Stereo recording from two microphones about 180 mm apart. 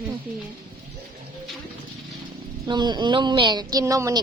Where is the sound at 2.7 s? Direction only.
25° right (ahead or behind).